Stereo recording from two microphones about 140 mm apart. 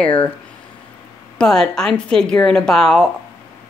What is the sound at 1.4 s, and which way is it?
A woman's voice, 5° left (ahead or behind).